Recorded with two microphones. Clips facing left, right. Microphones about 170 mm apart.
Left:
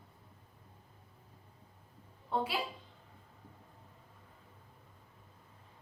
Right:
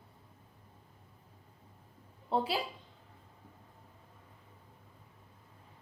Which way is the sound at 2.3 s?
30° right (ahead or behind).